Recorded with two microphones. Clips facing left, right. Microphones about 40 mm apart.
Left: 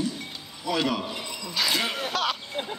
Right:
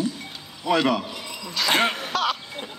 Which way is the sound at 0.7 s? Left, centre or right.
Right.